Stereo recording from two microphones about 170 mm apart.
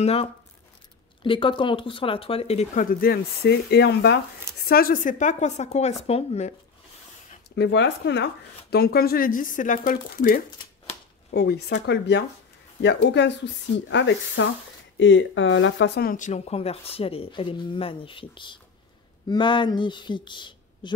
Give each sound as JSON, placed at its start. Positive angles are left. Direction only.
{"t": 0.0, "sound": "speech", "side_deg": 35}
{"t": 4.6, "sound": "speech", "side_deg": 60}
{"t": 7.5, "sound": "speech", "side_deg": 85}
{"t": 11.3, "sound": "speech", "side_deg": 70}